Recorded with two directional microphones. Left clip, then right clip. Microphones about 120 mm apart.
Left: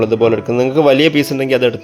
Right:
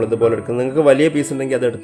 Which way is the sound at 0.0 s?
30° left (ahead or behind).